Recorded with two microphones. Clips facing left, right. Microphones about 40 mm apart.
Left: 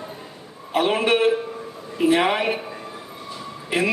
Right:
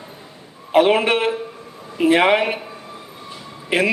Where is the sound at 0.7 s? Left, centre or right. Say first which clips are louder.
Right 4 dB; right.